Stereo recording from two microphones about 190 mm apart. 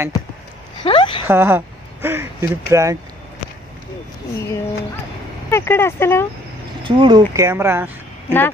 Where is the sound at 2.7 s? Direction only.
15° right (ahead or behind).